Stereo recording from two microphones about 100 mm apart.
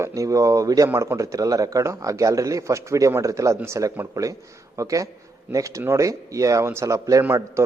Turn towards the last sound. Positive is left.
turn(degrees=-25)  # may be behind; listen again after turning